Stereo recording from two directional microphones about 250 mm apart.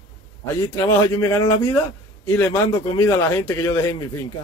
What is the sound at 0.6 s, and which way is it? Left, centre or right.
A man's voice, centre.